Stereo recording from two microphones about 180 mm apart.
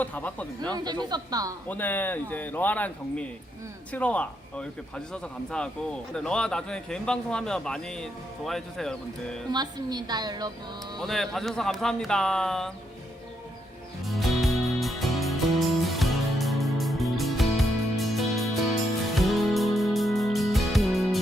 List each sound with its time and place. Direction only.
0.0 s speech: 10° left (ahead or behind)
0.7 s a woman's voice: 25° right (ahead or behind)
1.6 s a man's voice: 10° left (ahead or behind)
9.5 s a woman's voice: 25° right (ahead or behind)
11.0 s a man's voice: centre (ahead or behind)
14.2 s music: centre (ahead or behind)